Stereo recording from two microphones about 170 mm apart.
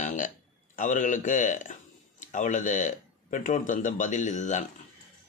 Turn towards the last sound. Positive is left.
turn(degrees=45)  # may be behind; listen again after turning